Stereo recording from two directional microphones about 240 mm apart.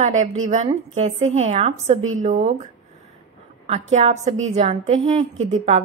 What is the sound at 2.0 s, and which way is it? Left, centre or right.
Speech, right.